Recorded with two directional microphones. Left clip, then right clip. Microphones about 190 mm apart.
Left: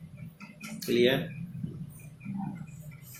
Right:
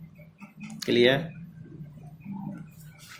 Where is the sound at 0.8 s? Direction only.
45° right (ahead or behind).